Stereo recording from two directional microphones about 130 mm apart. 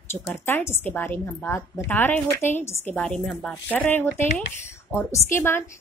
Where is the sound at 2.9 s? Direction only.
5° left (ahead or behind).